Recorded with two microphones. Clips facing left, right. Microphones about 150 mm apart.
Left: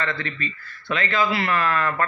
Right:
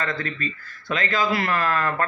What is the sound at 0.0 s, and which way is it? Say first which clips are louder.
A man's voice: even; 40° right (ahead or behind).